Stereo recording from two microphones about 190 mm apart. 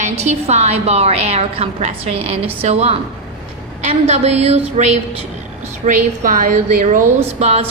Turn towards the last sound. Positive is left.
turn(degrees=-35)  # may be behind; listen again after turning